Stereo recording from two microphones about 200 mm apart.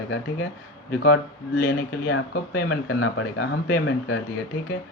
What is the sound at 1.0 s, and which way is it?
Speech, 50° left (ahead or behind).